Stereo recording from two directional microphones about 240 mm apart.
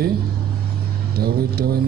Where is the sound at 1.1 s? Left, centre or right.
Right.